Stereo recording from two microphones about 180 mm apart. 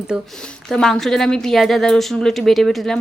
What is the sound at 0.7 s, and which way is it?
A woman's voice, centre (ahead or behind).